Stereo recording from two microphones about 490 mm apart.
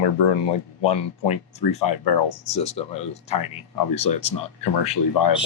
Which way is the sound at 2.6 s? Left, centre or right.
Centre.